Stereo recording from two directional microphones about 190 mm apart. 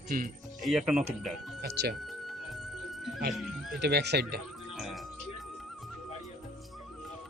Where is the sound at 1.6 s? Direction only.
55° right (ahead or behind).